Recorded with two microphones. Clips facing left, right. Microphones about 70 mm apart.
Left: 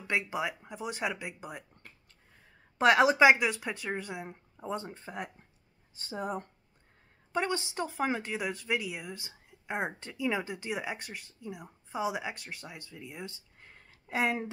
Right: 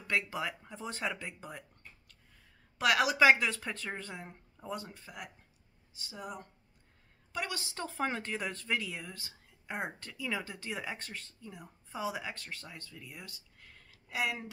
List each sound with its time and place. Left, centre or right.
0.0 s speech: left
2.8 s speech: left
7.3 s speech: left